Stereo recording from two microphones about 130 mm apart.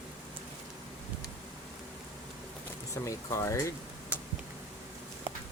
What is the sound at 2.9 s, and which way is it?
Speech, 25° left (ahead or behind).